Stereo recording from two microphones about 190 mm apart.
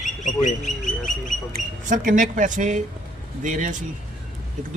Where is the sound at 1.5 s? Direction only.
45° right (ahead or behind).